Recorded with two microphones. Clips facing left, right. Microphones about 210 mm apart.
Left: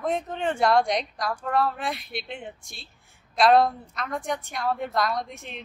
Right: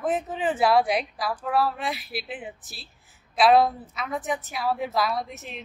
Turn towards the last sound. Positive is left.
turn(degrees=-5)  # may be behind; listen again after turning